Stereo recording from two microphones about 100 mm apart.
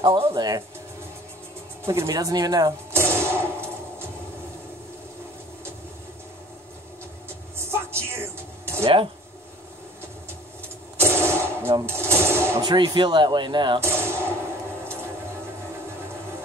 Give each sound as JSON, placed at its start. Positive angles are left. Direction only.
{"t": 0.0, "sound": "speech", "side_deg": -65}
{"t": 0.3, "sound": "speech", "side_deg": -40}
{"t": 1.9, "sound": "speech", "side_deg": -25}
{"t": 2.1, "sound": "speech", "side_deg": -40}
{"t": 2.9, "sound": "a sound", "side_deg": -25}
{"t": 7.5, "sound": "music", "side_deg": -25}
{"t": 8.8, "sound": "speech", "side_deg": -60}
{"t": 11.0, "sound": "a sound", "side_deg": -25}
{"t": 11.8, "sound": "speech", "side_deg": -25}
{"t": 12.6, "sound": "speech", "side_deg": -50}
{"t": 13.7, "sound": "a sound", "side_deg": -25}